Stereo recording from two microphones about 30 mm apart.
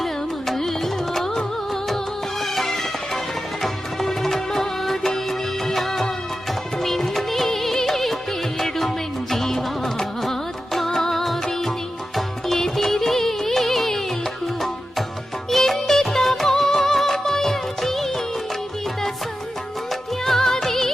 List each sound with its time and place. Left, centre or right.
0.0 s music: centre
3.6 s music: centre
5.7 s music of bollywood: centre
6.8 s music: centre
12.5 s music: centre
15.4 s music: centre
20.2 s music: centre